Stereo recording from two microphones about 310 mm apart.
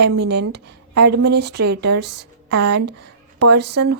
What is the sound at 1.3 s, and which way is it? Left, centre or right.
Speech, right.